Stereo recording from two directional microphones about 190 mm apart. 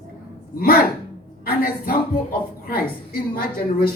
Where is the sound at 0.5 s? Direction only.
50° left (ahead or behind).